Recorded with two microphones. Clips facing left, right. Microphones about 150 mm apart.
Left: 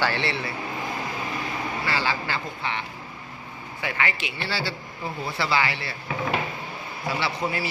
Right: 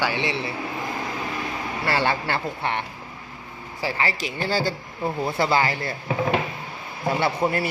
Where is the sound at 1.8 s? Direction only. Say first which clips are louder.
Right 6 dB; 60° right (ahead or behind).